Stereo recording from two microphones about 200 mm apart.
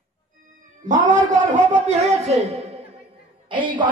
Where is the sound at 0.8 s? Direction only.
40° right (ahead or behind).